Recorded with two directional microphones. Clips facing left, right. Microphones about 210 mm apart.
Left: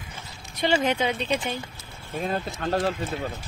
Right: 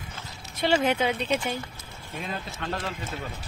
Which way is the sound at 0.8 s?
5° right (ahead or behind).